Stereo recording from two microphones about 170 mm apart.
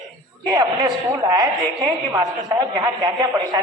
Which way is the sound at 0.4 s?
25° right (ahead or behind).